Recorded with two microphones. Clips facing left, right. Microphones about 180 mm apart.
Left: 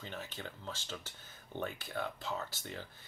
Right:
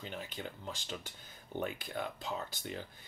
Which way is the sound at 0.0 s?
15° right (ahead or behind).